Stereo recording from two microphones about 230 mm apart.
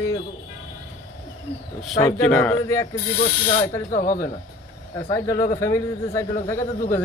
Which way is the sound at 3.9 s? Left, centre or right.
Left.